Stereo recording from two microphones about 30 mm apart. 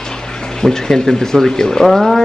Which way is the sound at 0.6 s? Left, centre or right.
Centre.